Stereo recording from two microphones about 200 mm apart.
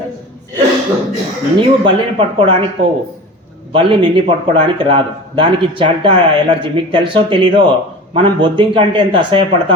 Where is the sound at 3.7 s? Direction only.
25° right (ahead or behind).